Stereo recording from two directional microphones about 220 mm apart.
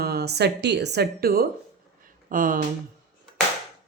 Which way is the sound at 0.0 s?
45° right (ahead or behind).